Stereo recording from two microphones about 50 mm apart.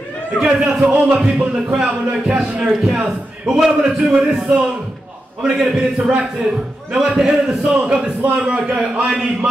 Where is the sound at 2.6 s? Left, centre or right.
Centre.